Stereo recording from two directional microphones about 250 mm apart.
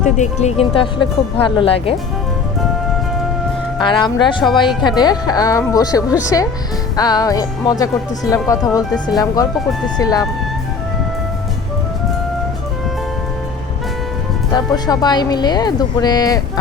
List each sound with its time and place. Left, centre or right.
0.0 s speech: left
3.8 s speech: centre
14.5 s speech: centre